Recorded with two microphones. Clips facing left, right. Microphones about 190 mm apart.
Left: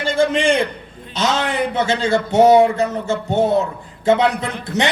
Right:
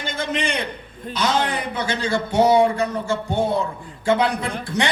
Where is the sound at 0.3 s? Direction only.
25° left (ahead or behind).